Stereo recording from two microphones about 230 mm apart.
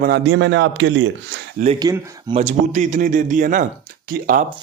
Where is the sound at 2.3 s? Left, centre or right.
Right.